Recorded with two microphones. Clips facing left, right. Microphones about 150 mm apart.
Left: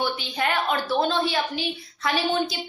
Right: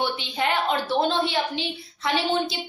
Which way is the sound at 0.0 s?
20° right (ahead or behind).